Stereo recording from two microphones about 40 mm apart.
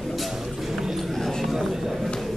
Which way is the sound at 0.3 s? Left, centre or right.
Centre.